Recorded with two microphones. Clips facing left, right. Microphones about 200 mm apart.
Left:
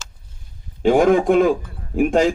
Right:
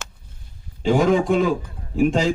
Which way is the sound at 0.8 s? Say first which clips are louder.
Left 3 dB; 55° left (ahead or behind).